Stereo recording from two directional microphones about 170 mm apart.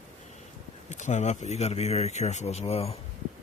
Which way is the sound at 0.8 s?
45° left (ahead or behind).